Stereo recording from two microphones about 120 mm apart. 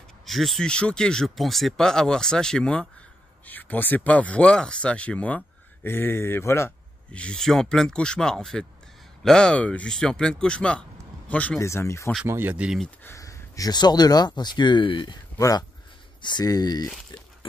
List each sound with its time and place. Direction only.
0.2 s speech: centre (ahead or behind); by 6.7 s 20° left (ahead or behind)
7.1 s speech: 10° left (ahead or behind)
11.6 s speech: 25° left (ahead or behind)
12.3 s speech: 15° right (ahead or behind)
13.0 s speech: 25° left (ahead or behind); by 15.1 s 45° left (ahead or behind)
15.3 s speech: 30° left (ahead or behind)
16.2 s speech: 40° left (ahead or behind)